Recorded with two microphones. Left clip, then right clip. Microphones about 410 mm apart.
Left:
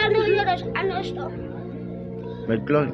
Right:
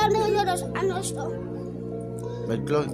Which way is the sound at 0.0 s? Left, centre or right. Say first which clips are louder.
Left 2 dB; right.